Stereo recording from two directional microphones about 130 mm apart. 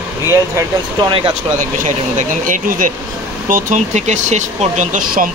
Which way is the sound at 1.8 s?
85° right.